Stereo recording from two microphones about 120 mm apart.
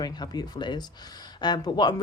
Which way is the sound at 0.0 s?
35° left (ahead or behind).